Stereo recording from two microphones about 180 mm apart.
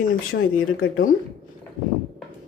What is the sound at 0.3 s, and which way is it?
Speech, 55° left (ahead or behind).